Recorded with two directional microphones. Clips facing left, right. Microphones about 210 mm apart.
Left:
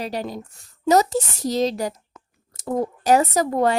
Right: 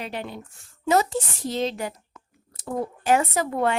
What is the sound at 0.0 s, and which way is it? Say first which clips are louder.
A woman's voice: left 5 dB; 40° left (ahead or behind).